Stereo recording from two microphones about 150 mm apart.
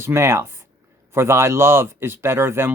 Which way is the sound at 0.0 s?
15° right (ahead or behind).